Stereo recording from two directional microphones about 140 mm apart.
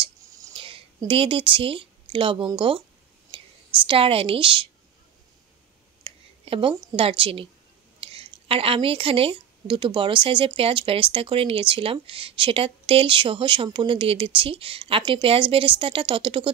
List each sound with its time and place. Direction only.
0.6 s a woman's voice: 40° right (ahead or behind)
6.0 s a sound: 40° right (ahead or behind)
6.7 s a woman's voice: 25° right (ahead or behind)
7.0 s a woman's voice: 40° right (ahead or behind)